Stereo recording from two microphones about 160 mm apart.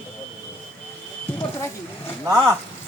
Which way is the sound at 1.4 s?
15° left (ahead or behind).